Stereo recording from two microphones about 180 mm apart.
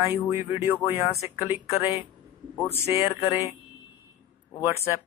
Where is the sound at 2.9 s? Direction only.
15° right (ahead or behind).